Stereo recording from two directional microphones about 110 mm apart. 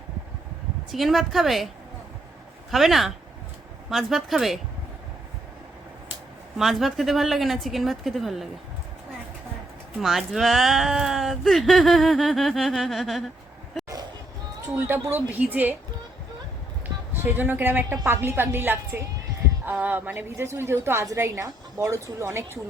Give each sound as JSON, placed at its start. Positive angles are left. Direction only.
{"t": 0.9, "sound": "speech", "side_deg": 0}
{"t": 2.6, "sound": "speech", "side_deg": 0}
{"t": 6.6, "sound": "speech", "side_deg": 0}
{"t": 10.0, "sound": "speech", "side_deg": 0}
{"t": 14.8, "sound": "a woman's voice", "side_deg": -20}
{"t": 17.2, "sound": "a woman's voice", "side_deg": -15}